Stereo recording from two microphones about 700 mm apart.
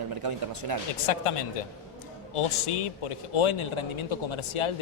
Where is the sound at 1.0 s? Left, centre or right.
Left.